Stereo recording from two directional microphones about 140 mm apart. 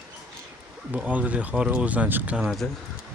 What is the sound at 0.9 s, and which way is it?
Speech, 10° right (ahead or behind).